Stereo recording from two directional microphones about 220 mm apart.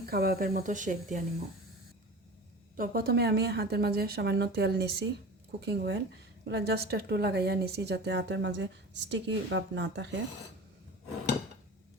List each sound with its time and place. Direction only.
0.1 s speech: 45° right (ahead or behind)
2.7 s a woman's voice: 40° right (ahead or behind)